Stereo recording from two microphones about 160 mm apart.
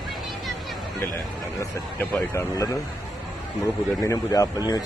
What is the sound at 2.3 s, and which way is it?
A man's voice, 20° left (ahead or behind).